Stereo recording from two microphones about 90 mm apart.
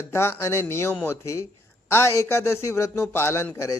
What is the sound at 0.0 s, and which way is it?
A man's voice, 30° left (ahead or behind).